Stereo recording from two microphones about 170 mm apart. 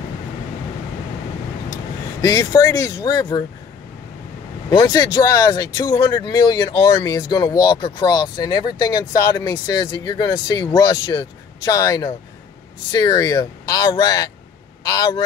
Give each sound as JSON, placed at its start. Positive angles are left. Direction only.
{"t": 2.2, "sound": "speech", "side_deg": 25}
{"t": 4.6, "sound": "speech", "side_deg": 25}